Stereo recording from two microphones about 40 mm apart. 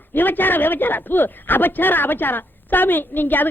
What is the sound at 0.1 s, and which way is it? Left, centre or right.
Speech, left.